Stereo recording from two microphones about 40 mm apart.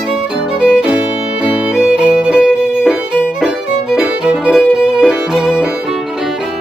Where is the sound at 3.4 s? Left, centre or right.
Centre.